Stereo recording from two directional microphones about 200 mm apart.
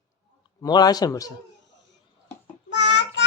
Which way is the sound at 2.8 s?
60° left (ahead or behind).